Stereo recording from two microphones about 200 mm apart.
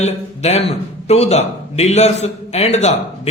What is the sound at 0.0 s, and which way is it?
A man's voice, 35° left (ahead or behind).